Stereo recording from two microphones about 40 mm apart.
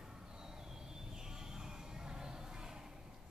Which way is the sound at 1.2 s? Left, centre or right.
Centre.